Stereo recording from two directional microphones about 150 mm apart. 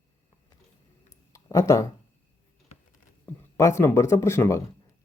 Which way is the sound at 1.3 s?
20° left (ahead or behind).